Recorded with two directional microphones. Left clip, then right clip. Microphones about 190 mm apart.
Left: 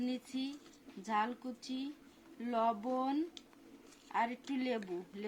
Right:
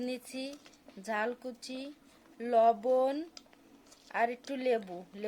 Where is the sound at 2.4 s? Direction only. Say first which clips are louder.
Right 9 dB; 55° right (ahead or behind).